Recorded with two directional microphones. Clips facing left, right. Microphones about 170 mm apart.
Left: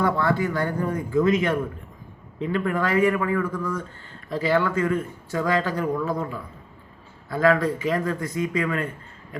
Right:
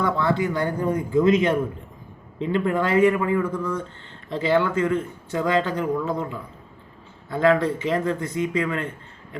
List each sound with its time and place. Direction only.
0.2 s speech: 20° right (ahead or behind)